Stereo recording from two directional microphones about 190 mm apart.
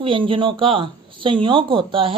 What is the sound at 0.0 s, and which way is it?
A woman's voice, 25° right (ahead or behind).